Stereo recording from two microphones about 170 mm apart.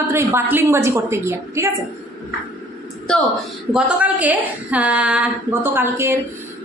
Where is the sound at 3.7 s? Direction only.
5° right (ahead or behind).